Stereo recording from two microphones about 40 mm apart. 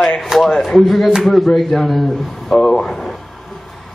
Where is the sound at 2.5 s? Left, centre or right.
Centre.